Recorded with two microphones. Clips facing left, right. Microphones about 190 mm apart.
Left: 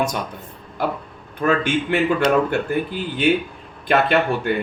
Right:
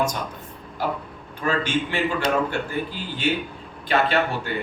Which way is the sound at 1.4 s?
55° left (ahead or behind).